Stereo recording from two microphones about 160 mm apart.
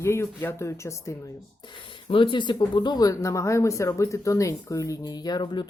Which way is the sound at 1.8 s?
30° left (ahead or behind).